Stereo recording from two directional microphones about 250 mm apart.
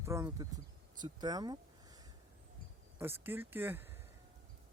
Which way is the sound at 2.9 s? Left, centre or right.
Centre.